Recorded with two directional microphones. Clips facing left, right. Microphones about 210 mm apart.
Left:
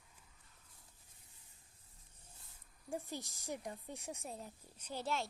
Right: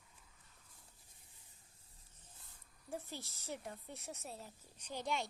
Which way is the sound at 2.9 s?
15° left (ahead or behind).